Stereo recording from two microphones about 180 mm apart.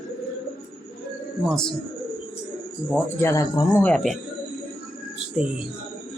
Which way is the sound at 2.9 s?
15° left (ahead or behind).